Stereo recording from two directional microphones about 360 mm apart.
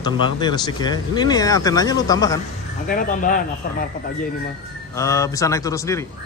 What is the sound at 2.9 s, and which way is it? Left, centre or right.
Speech, left.